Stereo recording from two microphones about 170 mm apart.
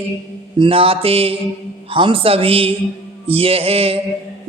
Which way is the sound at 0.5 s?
30° right (ahead or behind).